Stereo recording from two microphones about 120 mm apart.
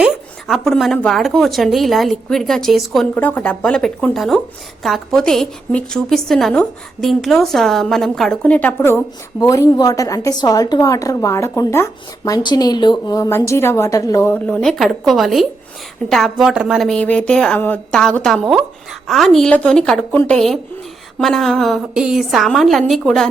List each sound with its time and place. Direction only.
0.0 s a woman's voice: centre (ahead or behind)
3.2 s a woman's voice: 15° left (ahead or behind)
9.4 s a woman's voice: 30° left (ahead or behind)
13.2 s a woman's voice: 25° left (ahead or behind)
14.6 s a woman's voice: centre (ahead or behind)